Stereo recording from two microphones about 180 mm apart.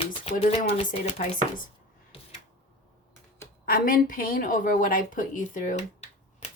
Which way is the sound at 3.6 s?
55° left (ahead or behind).